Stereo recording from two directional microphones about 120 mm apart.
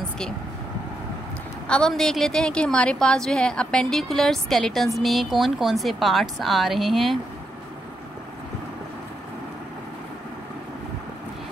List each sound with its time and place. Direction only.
1.7 s a woman's voice: 5° left (ahead or behind)